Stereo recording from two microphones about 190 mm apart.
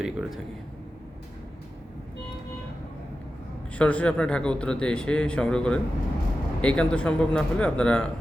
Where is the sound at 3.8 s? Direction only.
5° left (ahead or behind).